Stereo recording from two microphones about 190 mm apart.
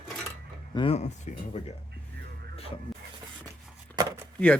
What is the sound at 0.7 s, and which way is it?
Speech, 30° left (ahead or behind).